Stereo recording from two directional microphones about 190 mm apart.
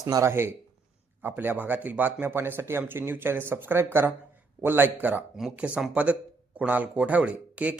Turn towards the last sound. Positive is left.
turn(degrees=-5)  # may be behind; listen again after turning